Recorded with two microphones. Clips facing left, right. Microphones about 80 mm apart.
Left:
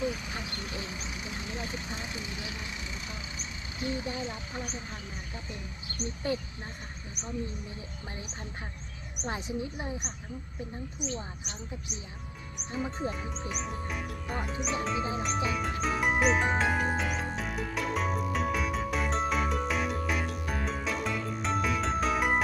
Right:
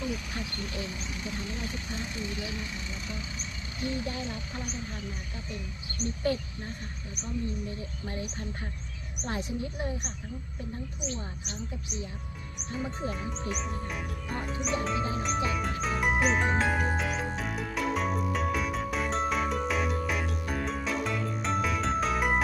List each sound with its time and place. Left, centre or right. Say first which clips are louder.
0.1 s speech: right 2 dB; centre
3.8 s speech: even; centre
9.2 s speech: right 1 dB; centre
12.7 s speech: even; centre
15.2 s music: right 1 dB; centre